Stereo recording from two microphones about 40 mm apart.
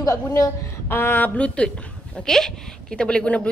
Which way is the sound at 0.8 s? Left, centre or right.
Left.